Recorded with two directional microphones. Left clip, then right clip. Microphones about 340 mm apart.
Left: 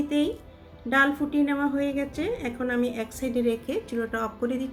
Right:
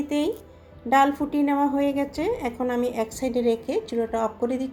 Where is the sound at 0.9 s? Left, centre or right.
Centre.